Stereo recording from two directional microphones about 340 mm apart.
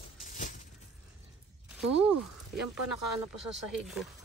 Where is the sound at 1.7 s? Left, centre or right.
Centre.